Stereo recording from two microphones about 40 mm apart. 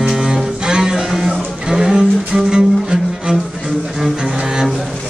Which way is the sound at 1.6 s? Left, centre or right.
Centre.